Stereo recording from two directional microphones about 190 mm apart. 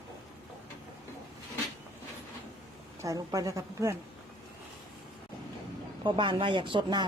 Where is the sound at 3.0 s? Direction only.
15° right (ahead or behind).